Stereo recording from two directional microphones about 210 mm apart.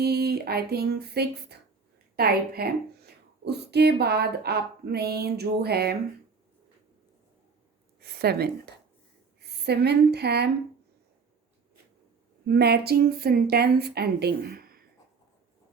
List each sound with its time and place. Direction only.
0.0 s speech: 50° right (ahead or behind)
8.0 s a woman's voice: 50° right (ahead or behind)
12.5 s speech: 50° right (ahead or behind)